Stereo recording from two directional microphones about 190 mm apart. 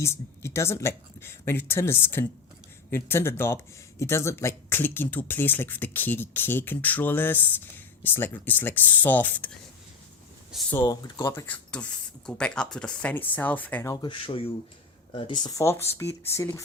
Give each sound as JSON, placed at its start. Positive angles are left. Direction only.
{"t": 0.0, "sound": "speech", "side_deg": 15}
{"t": 10.7, "sound": "speech", "side_deg": 15}
{"t": 13.9, "sound": "speech", "side_deg": 25}